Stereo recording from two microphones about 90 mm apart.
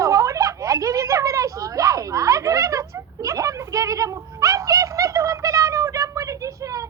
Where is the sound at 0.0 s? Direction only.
40° right (ahead or behind).